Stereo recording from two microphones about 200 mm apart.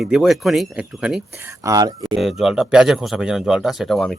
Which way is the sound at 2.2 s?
Centre (ahead or behind).